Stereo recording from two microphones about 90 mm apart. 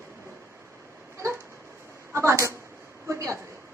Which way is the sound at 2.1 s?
30° right (ahead or behind).